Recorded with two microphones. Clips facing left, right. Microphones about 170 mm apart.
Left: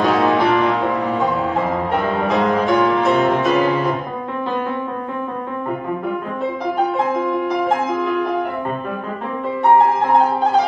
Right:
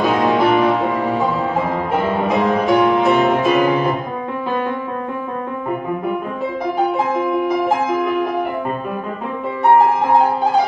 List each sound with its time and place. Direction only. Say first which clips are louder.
0.0 s music: even; 10° right (ahead or behind)
2.2 s music: even; 10° right (ahead or behind)